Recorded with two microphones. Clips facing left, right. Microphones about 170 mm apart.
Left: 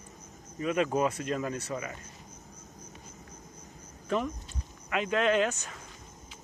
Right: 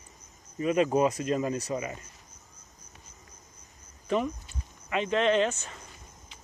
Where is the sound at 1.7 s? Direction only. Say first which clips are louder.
Right 4 dB; 15° right (ahead or behind).